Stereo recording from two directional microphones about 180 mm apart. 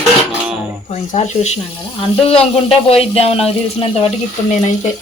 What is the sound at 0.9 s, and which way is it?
Speech, 40° left (ahead or behind).